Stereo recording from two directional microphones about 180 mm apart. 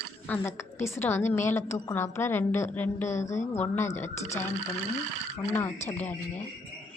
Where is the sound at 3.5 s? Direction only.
15° left (ahead or behind).